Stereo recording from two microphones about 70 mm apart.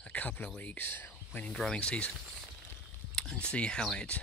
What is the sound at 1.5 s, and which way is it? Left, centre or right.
Speech, centre.